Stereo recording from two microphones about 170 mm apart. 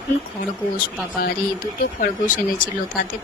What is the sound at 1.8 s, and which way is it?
Speech, 50° left (ahead or behind).